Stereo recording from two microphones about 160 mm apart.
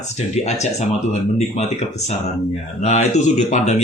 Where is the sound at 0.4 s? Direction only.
45° left (ahead or behind).